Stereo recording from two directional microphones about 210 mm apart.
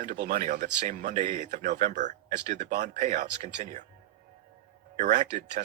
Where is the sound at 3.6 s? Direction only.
35° right (ahead or behind).